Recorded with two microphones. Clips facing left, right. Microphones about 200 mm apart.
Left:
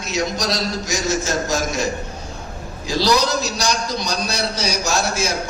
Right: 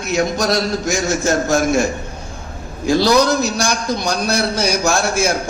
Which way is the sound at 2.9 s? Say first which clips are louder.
Right 5 dB; 55° right (ahead or behind).